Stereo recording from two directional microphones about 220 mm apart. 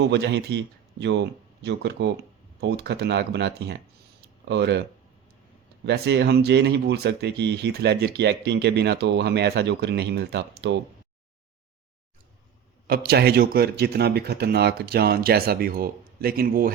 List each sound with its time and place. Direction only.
0.0 s speech: 50° right (ahead or behind)
5.8 s speech: 50° right (ahead or behind)
12.9 s speech: 45° right (ahead or behind)